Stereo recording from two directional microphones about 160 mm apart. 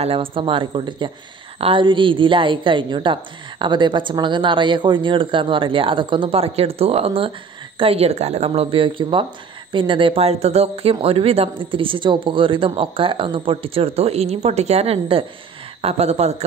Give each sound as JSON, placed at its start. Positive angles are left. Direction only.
{"t": 0.0, "sound": "a woman's voice", "side_deg": -35}